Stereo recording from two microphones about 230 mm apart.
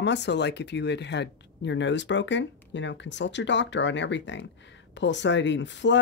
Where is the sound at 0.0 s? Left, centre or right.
Left.